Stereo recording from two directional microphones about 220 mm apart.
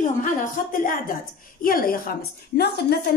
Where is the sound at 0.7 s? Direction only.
40° left (ahead or behind).